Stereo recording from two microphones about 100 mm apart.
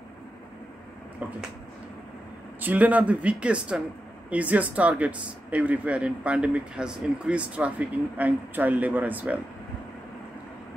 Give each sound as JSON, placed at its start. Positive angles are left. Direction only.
{"t": 1.2, "sound": "speech", "side_deg": -15}
{"t": 2.6, "sound": "speech", "side_deg": -15}